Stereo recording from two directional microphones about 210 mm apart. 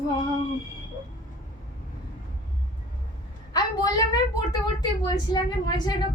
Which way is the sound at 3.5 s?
20° left (ahead or behind).